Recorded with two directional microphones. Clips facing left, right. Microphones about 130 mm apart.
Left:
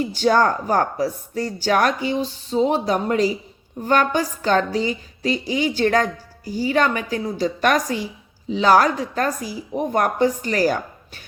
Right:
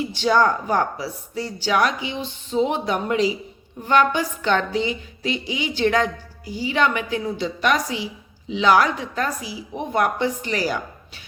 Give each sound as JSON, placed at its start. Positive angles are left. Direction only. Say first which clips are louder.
{"t": 0.0, "sound": "a woman's voice", "louder": "left 1 dB", "side_deg": 45}